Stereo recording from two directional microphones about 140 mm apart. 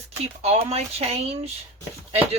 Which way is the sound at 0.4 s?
45° right (ahead or behind).